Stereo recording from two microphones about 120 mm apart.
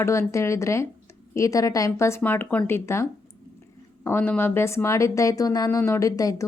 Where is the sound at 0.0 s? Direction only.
25° left (ahead or behind).